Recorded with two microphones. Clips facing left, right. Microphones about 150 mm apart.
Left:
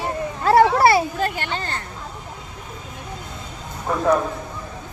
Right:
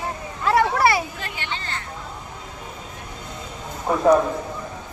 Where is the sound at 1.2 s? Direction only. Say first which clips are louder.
Left 7 dB; 45° left (ahead or behind).